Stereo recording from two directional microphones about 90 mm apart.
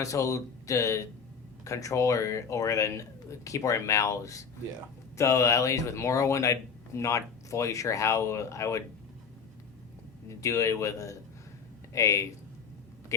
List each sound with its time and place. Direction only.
0.0 s speech: 35° left (ahead or behind)
10.2 s speech: 35° left (ahead or behind)